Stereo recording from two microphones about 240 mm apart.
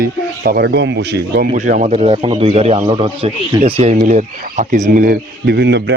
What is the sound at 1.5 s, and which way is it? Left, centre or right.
A man's voice, right.